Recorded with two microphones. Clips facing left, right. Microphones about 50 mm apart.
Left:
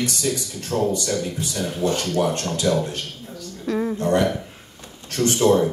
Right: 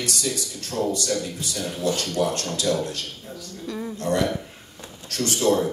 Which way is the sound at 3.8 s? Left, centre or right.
Left.